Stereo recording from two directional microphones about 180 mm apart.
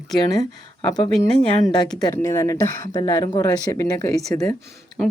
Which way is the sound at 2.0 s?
15° left (ahead or behind).